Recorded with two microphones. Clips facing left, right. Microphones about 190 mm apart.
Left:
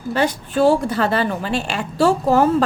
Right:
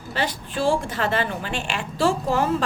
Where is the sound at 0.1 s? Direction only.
45° left (ahead or behind).